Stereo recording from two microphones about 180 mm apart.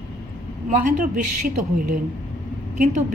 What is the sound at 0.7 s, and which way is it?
Speech, 50° right (ahead or behind).